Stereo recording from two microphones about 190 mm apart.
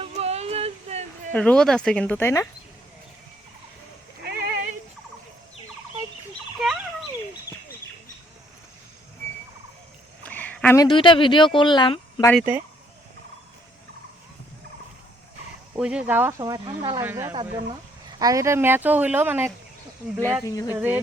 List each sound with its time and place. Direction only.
0.0 s a sound: 35° right (ahead or behind)
1.3 s speech: 5° left (ahead or behind)
4.2 s a sound: 55° right (ahead or behind)
10.2 s a sound: 10° left (ahead or behind)
10.8 s speech: 25° left (ahead or behind)
12.4 s speech: 10° right (ahead or behind)
15.7 s speech: 5° right (ahead or behind)
17.3 s speech: 25° right (ahead or behind)
18.2 s speech: 20° right (ahead or behind)
20.4 s speech: 20° left (ahead or behind)
20.7 s speech: 10° right (ahead or behind)